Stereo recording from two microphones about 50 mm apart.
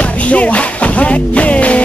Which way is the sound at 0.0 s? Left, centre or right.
Left.